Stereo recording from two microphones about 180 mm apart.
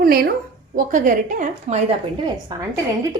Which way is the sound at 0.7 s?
45° right (ahead or behind).